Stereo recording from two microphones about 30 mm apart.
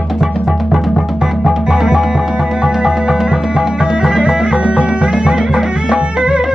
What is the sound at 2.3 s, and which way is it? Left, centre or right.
Music, right.